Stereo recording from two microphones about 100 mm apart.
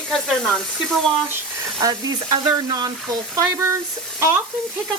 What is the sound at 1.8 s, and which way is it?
Frying, 40° right (ahead or behind).